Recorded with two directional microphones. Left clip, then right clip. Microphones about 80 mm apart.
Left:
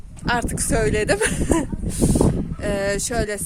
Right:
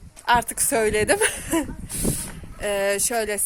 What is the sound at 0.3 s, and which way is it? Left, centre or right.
Speech, left.